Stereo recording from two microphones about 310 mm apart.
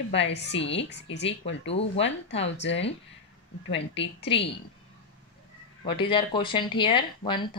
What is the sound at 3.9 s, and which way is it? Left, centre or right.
Speech, centre.